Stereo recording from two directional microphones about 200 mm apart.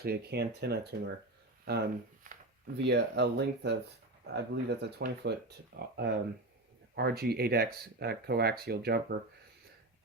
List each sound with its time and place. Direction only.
0.0 s speech: 50° right (ahead or behind)
2.3 s a sound: 40° right (ahead or behind)
2.7 s speech: 60° right (ahead or behind)
6.9 s speech: 50° right (ahead or behind)